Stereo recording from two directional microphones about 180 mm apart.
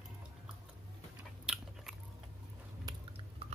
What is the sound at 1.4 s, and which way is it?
Biting, 5° right (ahead or behind).